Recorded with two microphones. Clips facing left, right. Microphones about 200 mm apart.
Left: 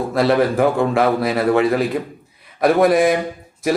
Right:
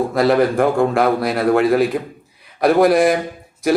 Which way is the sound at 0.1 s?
Centre (ahead or behind).